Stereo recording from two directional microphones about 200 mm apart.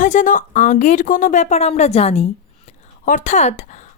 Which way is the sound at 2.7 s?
40° left (ahead or behind).